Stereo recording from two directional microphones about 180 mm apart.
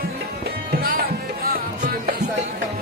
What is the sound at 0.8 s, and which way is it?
Music, 55° right (ahead or behind).